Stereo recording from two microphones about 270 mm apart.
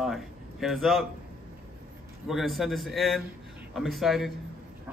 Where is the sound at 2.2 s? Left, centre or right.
Centre.